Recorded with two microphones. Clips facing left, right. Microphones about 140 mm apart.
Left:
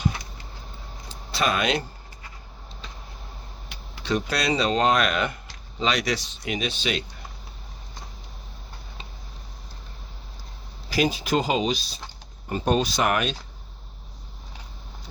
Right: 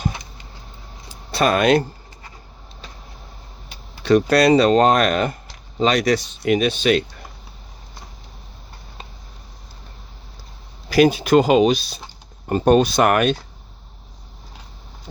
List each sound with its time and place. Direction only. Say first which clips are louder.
1.3 s speech: right 8 dB; 50° right (ahead or behind)
4.0 s speech: right 11 dB; 60° right (ahead or behind)
10.8 s speech: right 9 dB; 65° right (ahead or behind)